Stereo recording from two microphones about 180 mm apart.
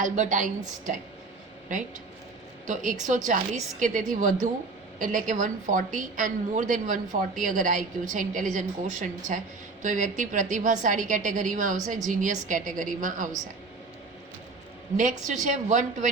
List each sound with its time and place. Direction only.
0.0 s a woman's voice: 45° right (ahead or behind)
2.6 s a woman's voice: 45° right (ahead or behind)
15.3 s a woman's voice: 45° right (ahead or behind)